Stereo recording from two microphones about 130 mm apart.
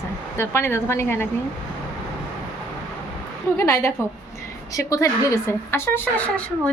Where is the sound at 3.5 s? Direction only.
20° left (ahead or behind).